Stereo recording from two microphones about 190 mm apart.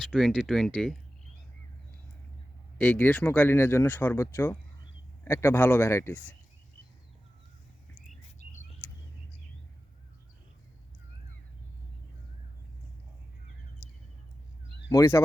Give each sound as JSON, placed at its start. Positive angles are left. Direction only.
{"t": 0.1, "sound": "speech", "side_deg": 0}
{"t": 2.7, "sound": "speech", "side_deg": 10}
{"t": 14.8, "sound": "speech", "side_deg": 15}